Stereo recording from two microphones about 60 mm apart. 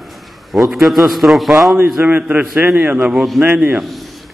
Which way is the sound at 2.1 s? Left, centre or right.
Right.